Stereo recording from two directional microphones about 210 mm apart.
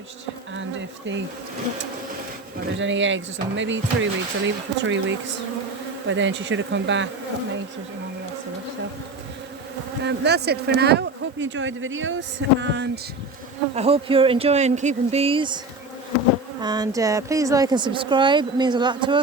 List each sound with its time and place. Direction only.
0.5 s speech: 60° right (ahead or behind)
2.7 s speech: 60° right (ahead or behind)
10.0 s speech: 55° right (ahead or behind)
13.7 s a woman's voice: 30° right (ahead or behind)
16.6 s a woman's voice: 20° right (ahead or behind)